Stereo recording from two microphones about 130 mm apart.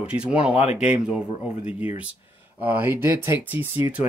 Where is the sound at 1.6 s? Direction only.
10° right (ahead or behind).